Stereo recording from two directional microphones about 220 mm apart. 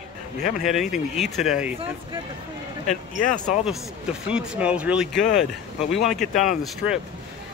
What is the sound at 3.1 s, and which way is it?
Speech, 35° left (ahead or behind).